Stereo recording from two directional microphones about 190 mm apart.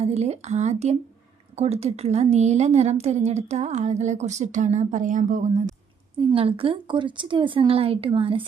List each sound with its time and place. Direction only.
0.0 s a woman's voice: 35° right (ahead or behind)
6.1 s a woman's voice: 30° right (ahead or behind)